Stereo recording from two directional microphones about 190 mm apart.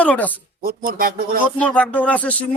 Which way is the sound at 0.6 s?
50° right (ahead or behind).